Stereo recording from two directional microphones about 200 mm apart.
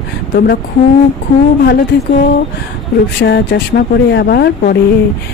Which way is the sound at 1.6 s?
50° left (ahead or behind).